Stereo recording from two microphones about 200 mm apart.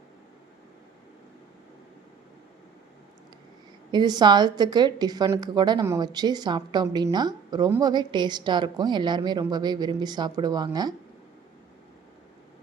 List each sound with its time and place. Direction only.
3.9 s a woman's voice: 20° right (ahead or behind)